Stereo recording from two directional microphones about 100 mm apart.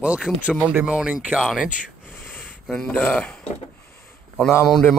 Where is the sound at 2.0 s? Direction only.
20° left (ahead or behind).